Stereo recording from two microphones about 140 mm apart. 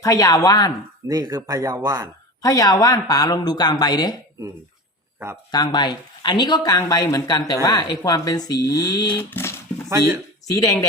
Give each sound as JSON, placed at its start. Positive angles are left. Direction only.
{"t": 0.0, "sound": "speech", "side_deg": 25}
{"t": 1.0, "sound": "speech", "side_deg": -25}
{"t": 2.4, "sound": "speech", "side_deg": 25}
{"t": 5.5, "sound": "speech", "side_deg": 30}
{"t": 9.3, "sound": "a sound", "side_deg": 20}